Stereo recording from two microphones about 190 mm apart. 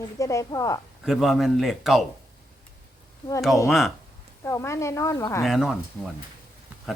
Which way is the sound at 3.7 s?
Centre (ahead or behind).